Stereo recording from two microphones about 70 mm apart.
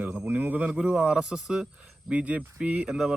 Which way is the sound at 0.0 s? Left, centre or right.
Right.